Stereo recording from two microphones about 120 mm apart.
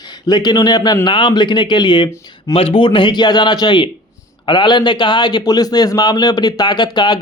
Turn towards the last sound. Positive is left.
turn(degrees=40)  # may be behind; listen again after turning